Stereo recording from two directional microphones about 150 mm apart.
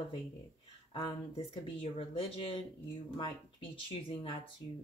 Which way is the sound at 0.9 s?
35° left (ahead or behind).